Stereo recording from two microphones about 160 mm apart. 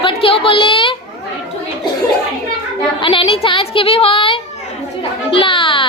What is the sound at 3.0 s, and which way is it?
A woman's voice, 35° left (ahead or behind).